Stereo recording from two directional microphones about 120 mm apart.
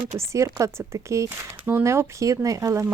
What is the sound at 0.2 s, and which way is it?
Speech, 25° right (ahead or behind).